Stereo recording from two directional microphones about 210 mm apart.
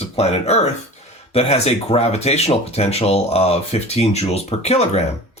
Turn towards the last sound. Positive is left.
turn(degrees=30)  # may be behind; listen again after turning